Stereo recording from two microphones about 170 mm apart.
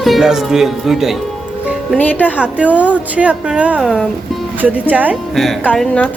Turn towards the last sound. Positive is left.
turn(degrees=5)  # may be behind; listen again after turning